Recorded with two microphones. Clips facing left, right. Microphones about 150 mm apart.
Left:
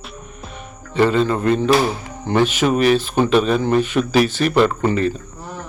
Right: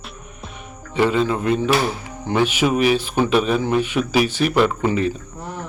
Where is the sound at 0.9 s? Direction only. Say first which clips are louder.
Left 2 dB; 10° right (ahead or behind).